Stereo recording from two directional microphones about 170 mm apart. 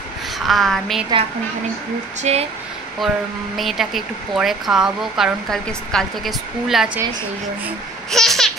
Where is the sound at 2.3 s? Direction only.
40° right (ahead or behind).